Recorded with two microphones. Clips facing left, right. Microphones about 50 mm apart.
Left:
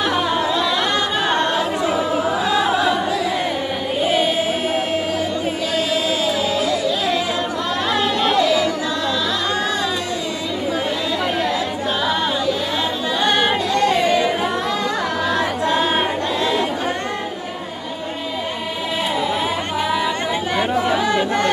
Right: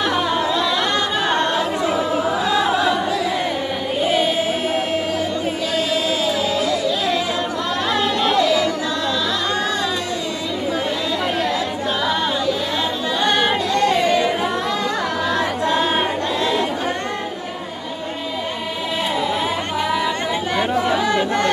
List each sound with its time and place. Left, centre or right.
0.0 s singing: centre
1.3 s choir: centre
4.0 s music: centre
6.0 s music: centre
7.9 s a sound: centre
12.0 s a capella: centre
13.2 s singing: centre
19.4 s chatter: centre